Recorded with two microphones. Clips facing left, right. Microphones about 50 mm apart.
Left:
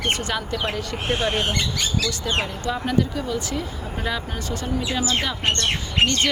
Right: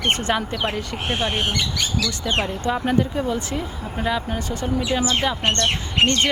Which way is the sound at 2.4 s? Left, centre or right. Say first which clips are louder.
Right 3 dB; right.